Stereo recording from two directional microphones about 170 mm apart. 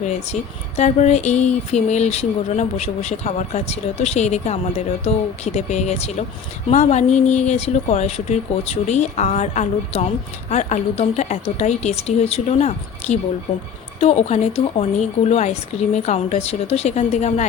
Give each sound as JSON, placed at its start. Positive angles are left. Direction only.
{"t": 0.0, "sound": "speech", "side_deg": 45}